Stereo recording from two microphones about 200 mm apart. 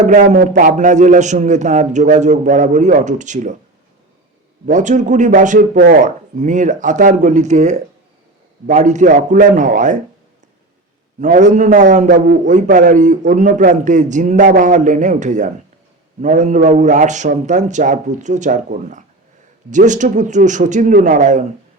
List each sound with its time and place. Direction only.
0.0 s a man's voice: 35° right (ahead or behind)
4.6 s a man's voice: 40° right (ahead or behind)
11.2 s a man's voice: 40° right (ahead or behind)